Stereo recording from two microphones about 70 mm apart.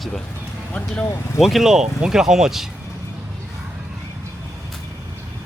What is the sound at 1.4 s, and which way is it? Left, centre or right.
Speech, centre.